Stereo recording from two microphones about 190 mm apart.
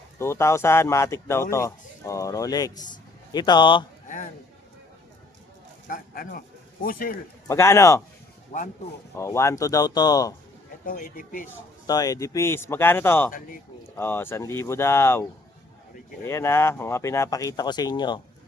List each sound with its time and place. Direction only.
0.2 s speech: 15° left (ahead or behind)
5.9 s speech: 45° left (ahead or behind)
7.4 s speech: 15° left (ahead or behind)
9.1 s speech: 15° left (ahead or behind)
10.8 s speech: 45° left (ahead or behind)
11.9 s speech: 20° left (ahead or behind)